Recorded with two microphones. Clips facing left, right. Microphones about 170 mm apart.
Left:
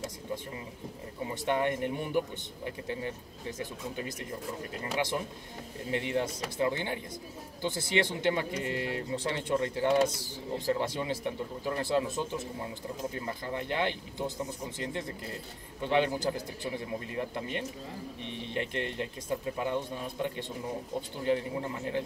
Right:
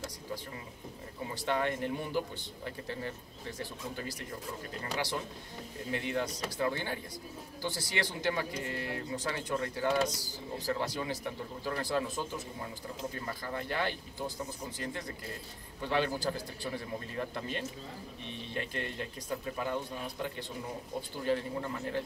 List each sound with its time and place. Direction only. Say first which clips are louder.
1.3 s speech: left 3 dB; 20° left (ahead or behind)
5.9 s a man's voice: left 3 dB; 20° left (ahead or behind)